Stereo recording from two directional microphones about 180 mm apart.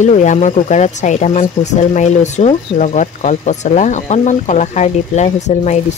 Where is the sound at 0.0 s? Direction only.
40° left (ahead or behind).